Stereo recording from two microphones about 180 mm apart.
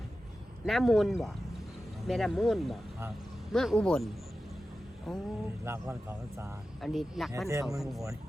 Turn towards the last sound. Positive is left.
turn(degrees=-15)  # may be behind; listen again after turning